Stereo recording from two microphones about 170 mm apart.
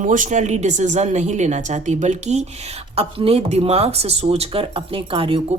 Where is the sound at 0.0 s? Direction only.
50° right (ahead or behind).